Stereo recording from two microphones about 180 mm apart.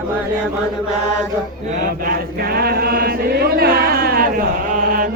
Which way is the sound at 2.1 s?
55° right (ahead or behind).